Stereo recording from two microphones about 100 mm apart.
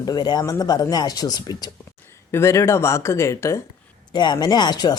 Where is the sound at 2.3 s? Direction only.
25° left (ahead or behind).